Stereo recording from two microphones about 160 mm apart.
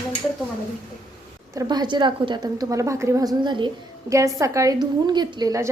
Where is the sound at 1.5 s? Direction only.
25° right (ahead or behind).